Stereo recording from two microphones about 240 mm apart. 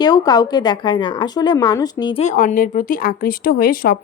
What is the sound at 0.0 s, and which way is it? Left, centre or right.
Speech, centre.